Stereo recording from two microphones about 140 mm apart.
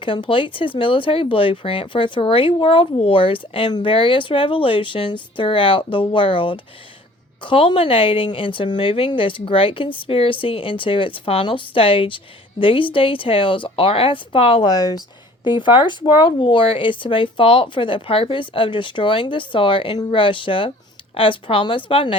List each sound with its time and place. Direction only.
0.0 s a woman's voice: 40° left (ahead or behind)